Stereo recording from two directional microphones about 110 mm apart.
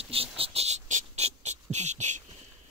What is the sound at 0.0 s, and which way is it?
Cricket, 60° right (ahead or behind).